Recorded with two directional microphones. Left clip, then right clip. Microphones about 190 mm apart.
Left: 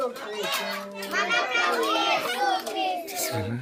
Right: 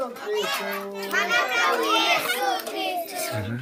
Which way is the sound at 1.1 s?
15° right (ahead or behind).